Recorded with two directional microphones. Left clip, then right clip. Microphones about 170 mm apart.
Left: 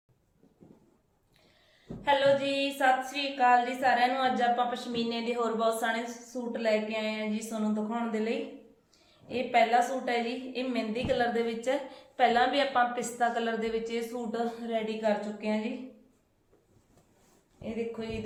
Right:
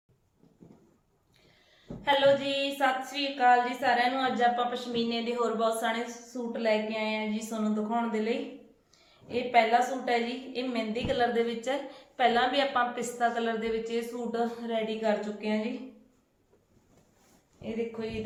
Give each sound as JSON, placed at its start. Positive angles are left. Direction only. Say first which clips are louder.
{"t": 2.0, "sound": "a woman's voice", "louder": "right 1 dB", "side_deg": 10}
{"t": 17.6, "sound": "a woman's voice", "louder": "right 1 dB", "side_deg": 10}